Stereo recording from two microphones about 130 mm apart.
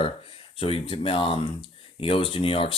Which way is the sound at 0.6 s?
45° left (ahead or behind).